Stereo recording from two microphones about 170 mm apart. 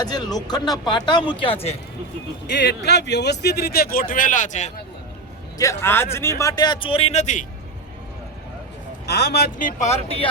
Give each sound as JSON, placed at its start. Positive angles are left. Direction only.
{"t": 0.0, "sound": "a man's voice", "side_deg": 25}
{"t": 2.5, "sound": "speech", "side_deg": 80}
{"t": 5.5, "sound": "a man's voice", "side_deg": 15}
{"t": 9.0, "sound": "speech", "side_deg": 75}
{"t": 9.8, "sound": "speech", "side_deg": 40}